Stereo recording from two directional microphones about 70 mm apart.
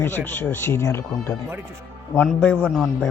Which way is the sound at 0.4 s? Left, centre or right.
Left.